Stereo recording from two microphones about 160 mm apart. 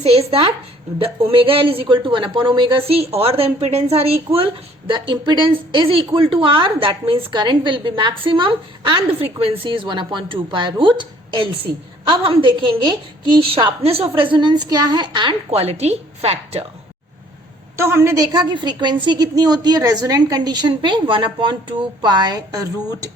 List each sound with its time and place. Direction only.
0.0 s a woman's voice: 40° right (ahead or behind)
17.7 s a woman's voice: 15° right (ahead or behind)